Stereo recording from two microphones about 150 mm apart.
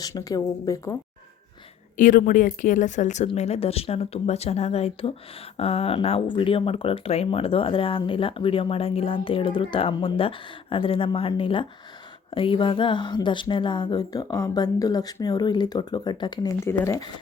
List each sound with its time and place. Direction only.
0.0 s a woman's voice: 25° left (ahead or behind)
2.0 s a woman's voice: 65° left (ahead or behind); by 17.1 s 20° left (ahead or behind)